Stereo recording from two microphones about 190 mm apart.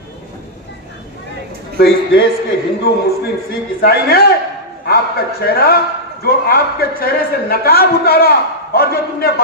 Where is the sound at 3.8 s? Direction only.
55° left (ahead or behind).